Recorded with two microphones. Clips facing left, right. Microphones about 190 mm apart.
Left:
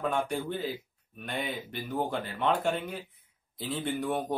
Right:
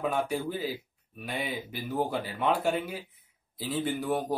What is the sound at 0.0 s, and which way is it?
Speech, 5° right (ahead or behind).